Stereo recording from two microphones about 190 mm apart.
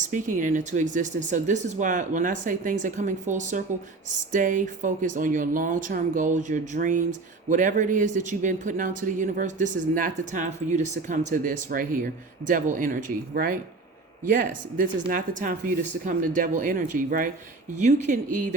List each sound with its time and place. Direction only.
0.1 s speech: 45° right (ahead or behind)
15.0 s speech: 45° right (ahead or behind)